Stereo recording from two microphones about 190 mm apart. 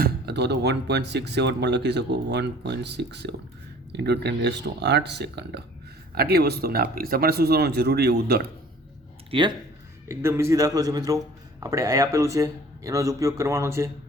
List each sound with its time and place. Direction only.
0.0 s speech: 60° right (ahead or behind)
9.3 s speech: 30° right (ahead or behind)
10.1 s speech: 15° right (ahead or behind)